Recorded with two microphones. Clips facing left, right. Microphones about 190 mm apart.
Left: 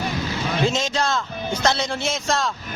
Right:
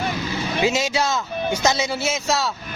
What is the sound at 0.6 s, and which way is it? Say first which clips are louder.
Speech: right 2 dB; 10° right (ahead or behind).